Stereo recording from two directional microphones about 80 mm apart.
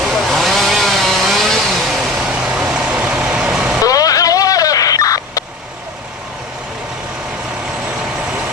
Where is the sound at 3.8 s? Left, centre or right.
Left.